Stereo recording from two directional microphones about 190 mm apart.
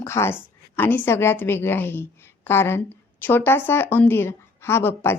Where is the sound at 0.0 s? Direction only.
15° left (ahead or behind).